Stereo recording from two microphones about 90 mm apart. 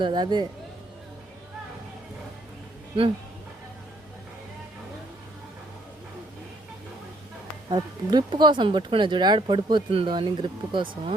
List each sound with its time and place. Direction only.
0.0 s speech: 55° right (ahead or behind)
7.7 s speech: 50° right (ahead or behind)